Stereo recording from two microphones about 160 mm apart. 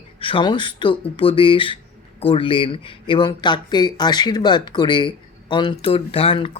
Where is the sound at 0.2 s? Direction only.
30° left (ahead or behind).